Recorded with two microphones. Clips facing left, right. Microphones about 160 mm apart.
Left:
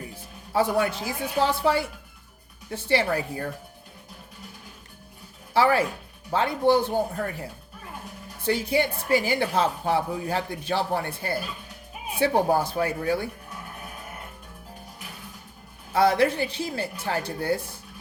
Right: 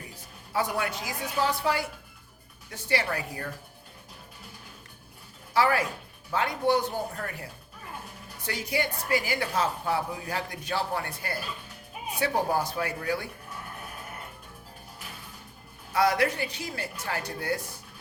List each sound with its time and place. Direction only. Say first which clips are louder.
0.5 s a woman's voice: left 6 dB; 30° left (ahead or behind)
5.5 s a woman's voice: left 4 dB; 30° left (ahead or behind)
15.9 s a woman's voice: left 4 dB; 30° left (ahead or behind)